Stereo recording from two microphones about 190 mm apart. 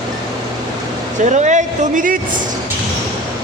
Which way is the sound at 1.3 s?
40° right (ahead or behind).